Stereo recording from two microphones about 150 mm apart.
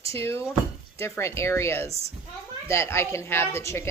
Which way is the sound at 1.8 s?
45° right (ahead or behind).